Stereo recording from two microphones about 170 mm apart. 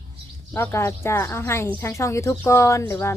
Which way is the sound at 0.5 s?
15° left (ahead or behind).